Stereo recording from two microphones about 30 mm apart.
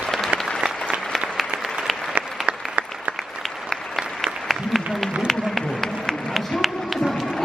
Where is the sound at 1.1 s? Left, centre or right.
Centre.